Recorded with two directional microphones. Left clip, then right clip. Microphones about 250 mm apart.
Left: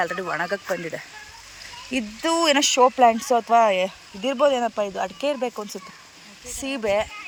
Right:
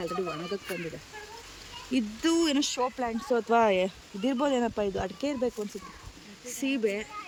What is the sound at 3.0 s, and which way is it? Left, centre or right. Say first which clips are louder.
Speech: left 16 dB; left.